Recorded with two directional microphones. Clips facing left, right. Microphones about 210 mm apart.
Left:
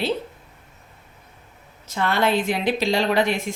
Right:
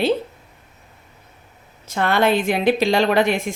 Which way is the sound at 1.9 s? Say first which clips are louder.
Right 3 dB; 55° right (ahead or behind).